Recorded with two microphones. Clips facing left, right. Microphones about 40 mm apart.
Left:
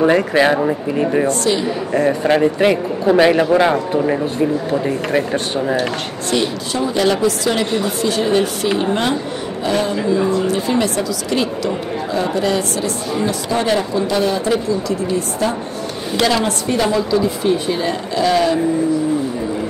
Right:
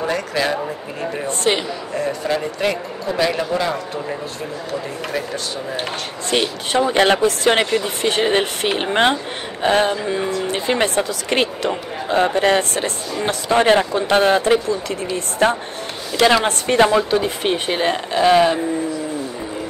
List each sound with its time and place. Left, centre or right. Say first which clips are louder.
0.0 s a man's voice: left 8 dB; left
1.4 s speech: left 1 dB; right
2.0 s a man's voice: left 7 dB; left
6.9 s speech: left 1 dB; right